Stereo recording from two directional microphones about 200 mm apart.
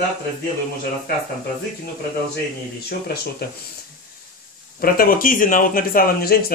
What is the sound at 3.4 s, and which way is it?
Speech, 50° left (ahead or behind).